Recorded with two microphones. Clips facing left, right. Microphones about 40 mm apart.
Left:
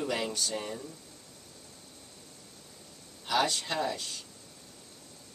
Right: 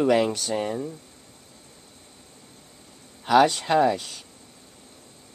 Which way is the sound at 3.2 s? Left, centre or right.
Right.